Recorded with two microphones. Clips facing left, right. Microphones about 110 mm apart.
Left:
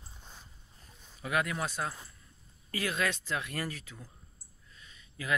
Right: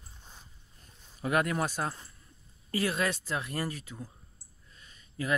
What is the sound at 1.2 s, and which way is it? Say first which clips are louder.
Speech: right 4 dB; 40° right (ahead or behind).